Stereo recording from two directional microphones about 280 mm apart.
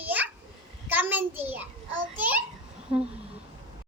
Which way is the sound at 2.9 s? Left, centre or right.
Centre.